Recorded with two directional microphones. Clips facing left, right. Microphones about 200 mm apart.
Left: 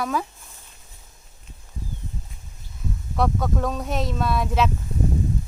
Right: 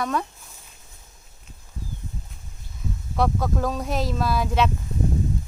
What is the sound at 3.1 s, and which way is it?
Speech, centre (ahead or behind).